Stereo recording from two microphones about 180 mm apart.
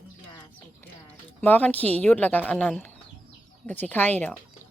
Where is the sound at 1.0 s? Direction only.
10° left (ahead or behind).